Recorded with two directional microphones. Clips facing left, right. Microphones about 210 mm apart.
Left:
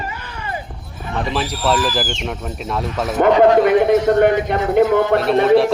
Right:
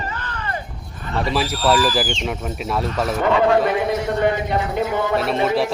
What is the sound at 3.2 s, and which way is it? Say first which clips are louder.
Speech: left 7 dB; 50° left (ahead or behind).